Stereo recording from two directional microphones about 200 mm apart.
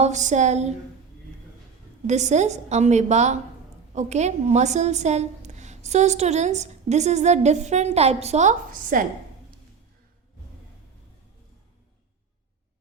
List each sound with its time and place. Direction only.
0.0 s a woman's voice: 35° right (ahead or behind)
2.0 s a woman's voice: 35° right (ahead or behind)